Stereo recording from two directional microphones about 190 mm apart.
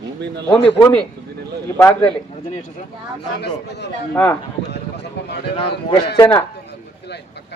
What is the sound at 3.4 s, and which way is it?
Speech, 60° left (ahead or behind).